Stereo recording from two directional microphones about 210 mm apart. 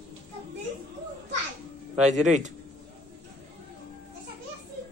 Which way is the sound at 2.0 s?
35° right (ahead or behind).